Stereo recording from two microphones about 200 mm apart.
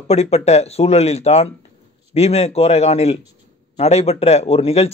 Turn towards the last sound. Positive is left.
turn(degrees=30)  # may be behind; listen again after turning